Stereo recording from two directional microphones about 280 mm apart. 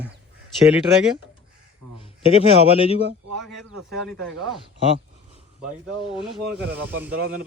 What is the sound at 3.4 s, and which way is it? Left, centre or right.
A man's voice, centre.